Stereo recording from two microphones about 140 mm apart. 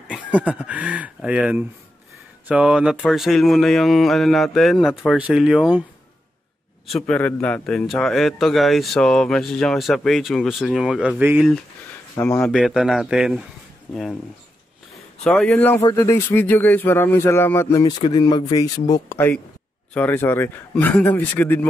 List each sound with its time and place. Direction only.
0.3 s a man's voice: 10° right (ahead or behind)
6.9 s a man's voice: 5° left (ahead or behind); by 11.4 s 10° right (ahead or behind)
12.2 s a man's voice: 10° left (ahead or behind)
15.2 s speech: 10° left (ahead or behind)